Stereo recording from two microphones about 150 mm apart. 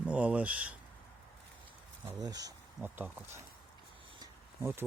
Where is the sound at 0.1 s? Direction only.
10° right (ahead or behind).